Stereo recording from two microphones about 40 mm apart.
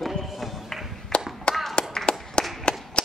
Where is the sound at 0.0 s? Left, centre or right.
Centre.